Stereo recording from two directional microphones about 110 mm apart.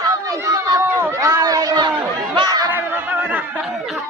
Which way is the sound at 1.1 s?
35° right (ahead or behind).